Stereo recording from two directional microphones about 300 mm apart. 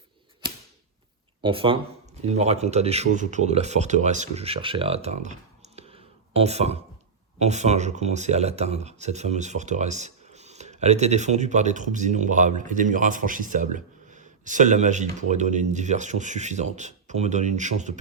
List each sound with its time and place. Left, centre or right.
1.4 s speech: centre